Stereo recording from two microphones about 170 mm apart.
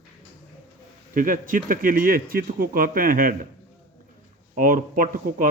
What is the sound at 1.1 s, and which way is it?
A man's voice, 50° right (ahead or behind).